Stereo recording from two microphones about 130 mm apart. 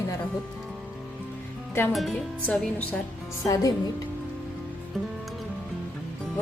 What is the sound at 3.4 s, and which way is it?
Speech, 25° left (ahead or behind).